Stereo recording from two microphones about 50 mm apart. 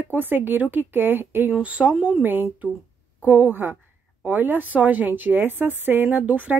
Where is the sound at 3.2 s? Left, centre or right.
Right.